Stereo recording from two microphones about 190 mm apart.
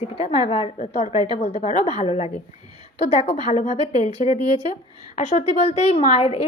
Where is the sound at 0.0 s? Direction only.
30° left (ahead or behind).